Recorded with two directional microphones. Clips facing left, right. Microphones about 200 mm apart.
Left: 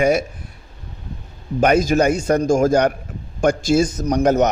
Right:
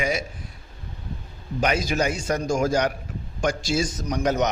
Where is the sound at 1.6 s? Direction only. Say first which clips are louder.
Left 8 dB; 50° left (ahead or behind).